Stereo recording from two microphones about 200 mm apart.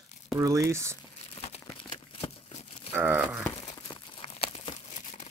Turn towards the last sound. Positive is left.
turn(degrees=30)  # may be behind; listen again after turning